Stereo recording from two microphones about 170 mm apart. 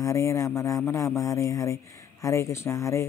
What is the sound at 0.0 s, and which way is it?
Speech, 20° left (ahead or behind).